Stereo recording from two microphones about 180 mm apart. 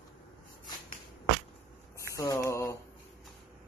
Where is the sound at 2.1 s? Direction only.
20° left (ahead or behind).